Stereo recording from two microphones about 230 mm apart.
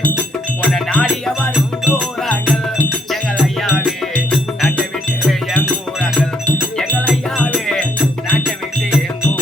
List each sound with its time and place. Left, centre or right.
0.6 s music: centre